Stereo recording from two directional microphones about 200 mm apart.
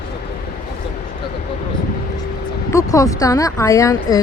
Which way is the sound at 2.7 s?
15° left (ahead or behind).